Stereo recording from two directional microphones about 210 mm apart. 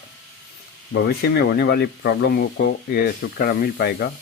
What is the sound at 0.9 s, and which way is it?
Speech, 50° left (ahead or behind).